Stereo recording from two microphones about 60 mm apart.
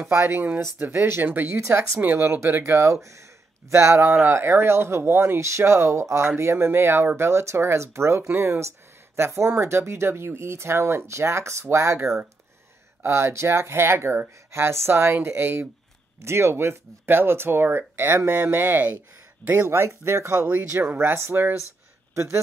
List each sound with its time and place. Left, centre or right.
0.1 s speech: right
1.6 s speech: right
3.7 s speech: right
9.1 s speech: right
22.1 s speech: right